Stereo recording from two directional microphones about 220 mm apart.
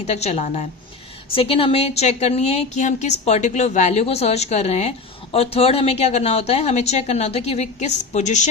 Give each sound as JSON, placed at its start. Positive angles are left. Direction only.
{"t": 0.1, "sound": "a woman's voice", "side_deg": 30}